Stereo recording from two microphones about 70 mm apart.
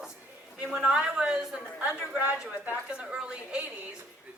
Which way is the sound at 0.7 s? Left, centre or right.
Centre.